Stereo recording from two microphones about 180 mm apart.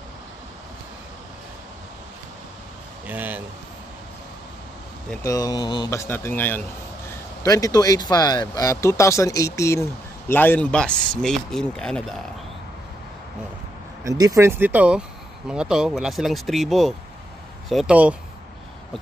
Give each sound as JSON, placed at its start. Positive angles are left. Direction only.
{"t": 3.1, "sound": "speech", "side_deg": -10}
{"t": 5.2, "sound": "speech", "side_deg": 20}
{"t": 14.0, "sound": "speech", "side_deg": -20}